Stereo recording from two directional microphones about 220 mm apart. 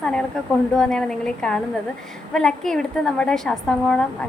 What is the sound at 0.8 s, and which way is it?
A woman's voice, 5° left (ahead or behind).